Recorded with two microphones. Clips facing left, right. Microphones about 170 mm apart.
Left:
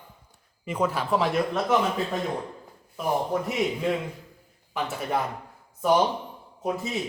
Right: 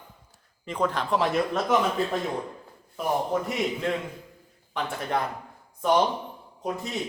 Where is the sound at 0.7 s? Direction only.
10° left (ahead or behind).